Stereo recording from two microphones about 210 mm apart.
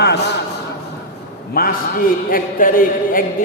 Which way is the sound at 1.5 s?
45° left (ahead or behind).